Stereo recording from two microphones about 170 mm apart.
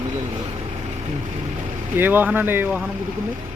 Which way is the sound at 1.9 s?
10° right (ahead or behind).